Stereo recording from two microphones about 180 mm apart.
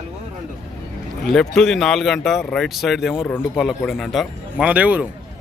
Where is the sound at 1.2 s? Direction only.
5° left (ahead or behind).